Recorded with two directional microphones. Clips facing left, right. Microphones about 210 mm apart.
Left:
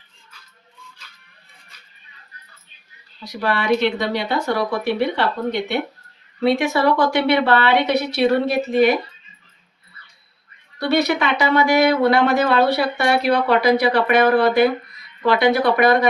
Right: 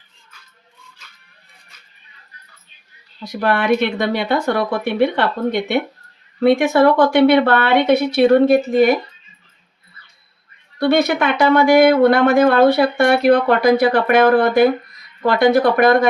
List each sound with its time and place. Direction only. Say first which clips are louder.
3.2 s speech: right 3 dB; 55° right (ahead or behind)
10.8 s speech: right 3 dB; 50° right (ahead or behind)